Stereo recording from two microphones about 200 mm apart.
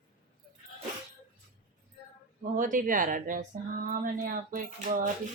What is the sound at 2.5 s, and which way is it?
Speech, 40° right (ahead or behind).